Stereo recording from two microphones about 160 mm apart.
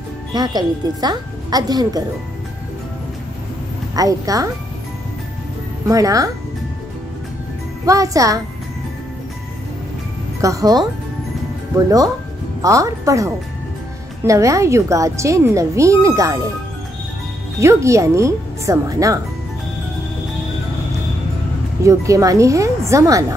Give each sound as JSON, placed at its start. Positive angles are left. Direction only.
{"t": 0.3, "sound": "speech", "side_deg": -25}
{"t": 3.9, "sound": "speech", "side_deg": -20}
{"t": 5.9, "sound": "speech", "side_deg": -20}
{"t": 7.8, "sound": "speech", "side_deg": -20}
{"t": 10.4, "sound": "speech", "side_deg": -20}
{"t": 17.6, "sound": "speech", "side_deg": -20}
{"t": 21.8, "sound": "speech", "side_deg": -20}